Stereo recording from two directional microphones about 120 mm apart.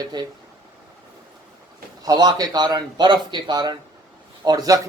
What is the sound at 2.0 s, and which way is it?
A man's voice, 35° right (ahead or behind).